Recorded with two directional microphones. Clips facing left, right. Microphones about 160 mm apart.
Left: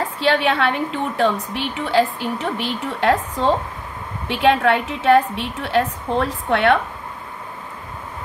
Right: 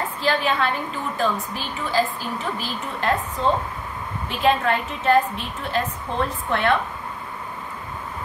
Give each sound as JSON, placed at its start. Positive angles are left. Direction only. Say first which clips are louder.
{"t": 0.2, "sound": "a woman's voice", "louder": "left 4 dB", "side_deg": 75}